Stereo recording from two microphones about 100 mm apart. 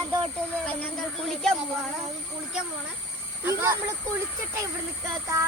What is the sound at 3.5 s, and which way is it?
Speech, 25° right (ahead or behind).